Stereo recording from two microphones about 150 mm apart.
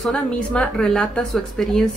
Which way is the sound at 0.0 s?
5° left (ahead or behind).